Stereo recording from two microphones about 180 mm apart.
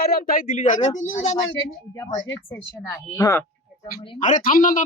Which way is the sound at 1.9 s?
15° left (ahead or behind).